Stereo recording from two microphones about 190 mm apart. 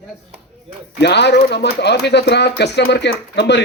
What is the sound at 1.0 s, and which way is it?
Speech, 65° left (ahead or behind).